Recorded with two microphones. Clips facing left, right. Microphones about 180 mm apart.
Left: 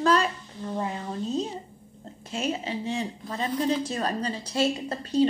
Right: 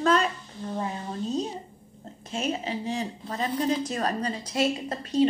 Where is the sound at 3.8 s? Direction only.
30° left (ahead or behind).